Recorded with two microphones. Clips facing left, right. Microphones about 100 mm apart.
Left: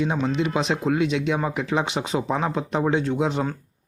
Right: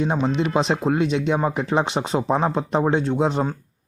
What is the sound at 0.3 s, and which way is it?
Speech, 40° right (ahead or behind).